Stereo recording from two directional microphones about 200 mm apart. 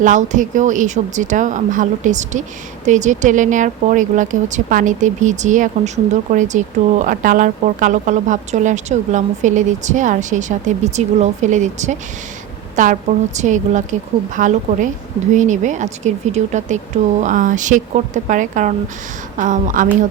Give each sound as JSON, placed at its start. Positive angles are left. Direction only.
{"t": 0.0, "sound": "speech", "side_deg": -40}